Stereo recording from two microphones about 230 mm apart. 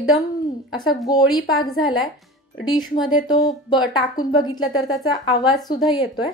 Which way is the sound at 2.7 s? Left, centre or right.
Centre.